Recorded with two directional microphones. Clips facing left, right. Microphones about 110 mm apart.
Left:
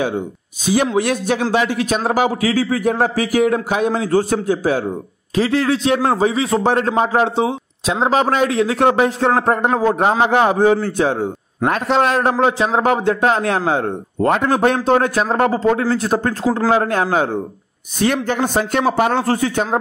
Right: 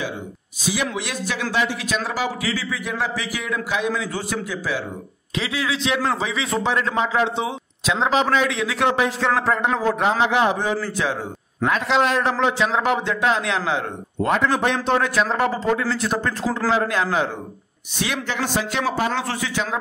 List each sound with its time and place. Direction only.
0.9 s a man's voice: 50° left (ahead or behind)
19.2 s a man's voice: 40° left (ahead or behind)